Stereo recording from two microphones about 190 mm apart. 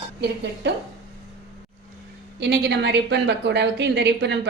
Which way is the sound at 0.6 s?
60° right (ahead or behind).